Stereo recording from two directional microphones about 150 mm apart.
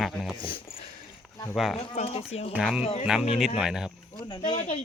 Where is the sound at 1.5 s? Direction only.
Centre (ahead or behind).